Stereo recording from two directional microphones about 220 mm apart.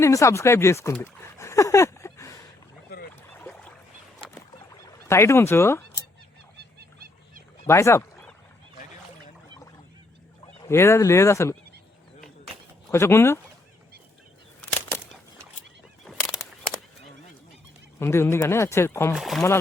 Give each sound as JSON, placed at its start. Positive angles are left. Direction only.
{"t": 0.0, "sound": "speech", "side_deg": 15}
{"t": 2.9, "sound": "boat", "side_deg": 45}
{"t": 3.3, "sound": "a sound", "side_deg": 5}
{"t": 5.0, "sound": "speech", "side_deg": 10}
{"t": 6.6, "sound": "a sound", "side_deg": -45}
{"t": 7.7, "sound": "speech", "side_deg": 10}
{"t": 10.6, "sound": "speech", "side_deg": 10}
{"t": 12.9, "sound": "speech", "side_deg": 10}
{"t": 18.0, "sound": "speech", "side_deg": 10}
{"t": 19.1, "sound": "speech", "side_deg": 0}